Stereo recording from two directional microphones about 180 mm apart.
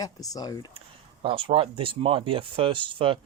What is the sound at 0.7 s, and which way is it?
Speech, 30° right (ahead or behind).